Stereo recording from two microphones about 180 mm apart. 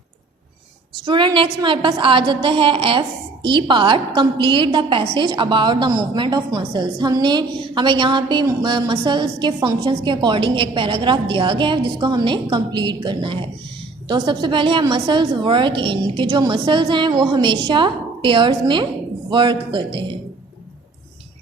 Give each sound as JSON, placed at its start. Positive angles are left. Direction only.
{"t": 1.0, "sound": "a woman's voice", "side_deg": -25}